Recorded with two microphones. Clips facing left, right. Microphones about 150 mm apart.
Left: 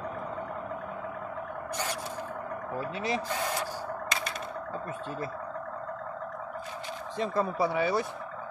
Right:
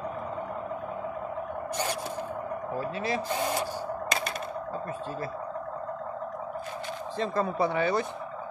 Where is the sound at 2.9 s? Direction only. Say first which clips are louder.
Even; 20° left (ahead or behind).